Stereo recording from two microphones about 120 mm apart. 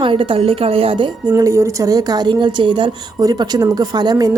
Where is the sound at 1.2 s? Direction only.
30° right (ahead or behind).